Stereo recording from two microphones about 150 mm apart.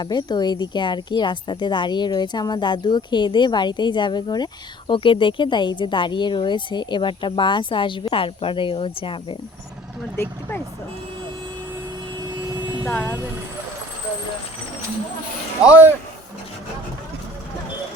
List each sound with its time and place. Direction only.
0.0 s a woman's voice: 30° left (ahead or behind)
12.8 s speech: 10° left (ahead or behind)
15.6 s speech: 10° right (ahead or behind)